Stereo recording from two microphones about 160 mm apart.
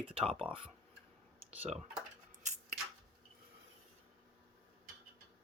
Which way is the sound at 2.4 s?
50° right (ahead or behind).